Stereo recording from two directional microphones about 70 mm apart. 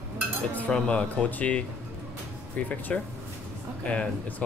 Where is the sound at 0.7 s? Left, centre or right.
Centre.